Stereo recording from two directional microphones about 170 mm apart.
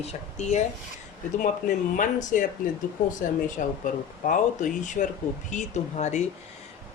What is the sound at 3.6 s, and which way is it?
Speech, 50° left (ahead or behind).